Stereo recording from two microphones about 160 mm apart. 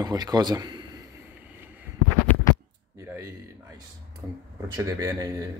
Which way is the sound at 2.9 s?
15° right (ahead or behind).